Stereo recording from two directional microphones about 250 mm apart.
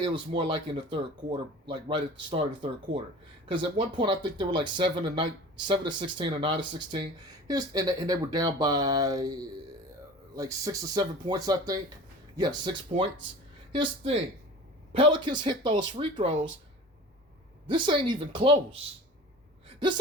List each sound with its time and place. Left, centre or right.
0.0 s speech: centre
13.7 s speech: right
17.7 s speech: centre